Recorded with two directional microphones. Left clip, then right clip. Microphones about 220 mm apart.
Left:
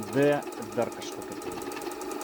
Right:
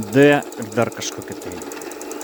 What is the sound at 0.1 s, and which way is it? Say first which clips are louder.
Speech: right 11 dB; 50° right (ahead or behind).